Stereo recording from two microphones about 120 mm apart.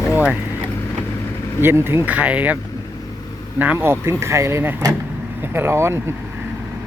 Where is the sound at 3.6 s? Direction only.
15° right (ahead or behind).